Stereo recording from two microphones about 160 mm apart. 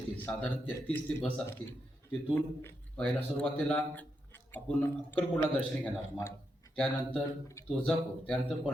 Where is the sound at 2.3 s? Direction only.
15° left (ahead or behind).